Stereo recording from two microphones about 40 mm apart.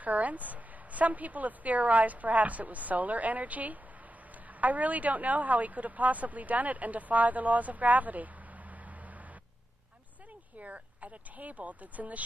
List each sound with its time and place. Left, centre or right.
0.0 s speech: right
10.6 s speech: right